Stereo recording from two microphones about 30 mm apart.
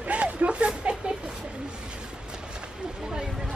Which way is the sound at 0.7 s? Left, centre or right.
Right.